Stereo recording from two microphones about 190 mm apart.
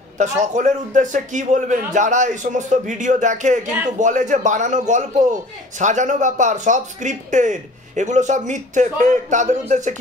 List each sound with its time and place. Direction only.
0.2 s speech: 40° right (ahead or behind)